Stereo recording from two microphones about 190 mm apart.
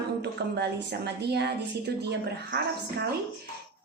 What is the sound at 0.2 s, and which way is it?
A woman's voice, 60° right (ahead or behind).